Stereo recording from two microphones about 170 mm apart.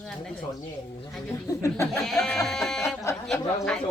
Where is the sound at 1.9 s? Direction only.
Centre (ahead or behind).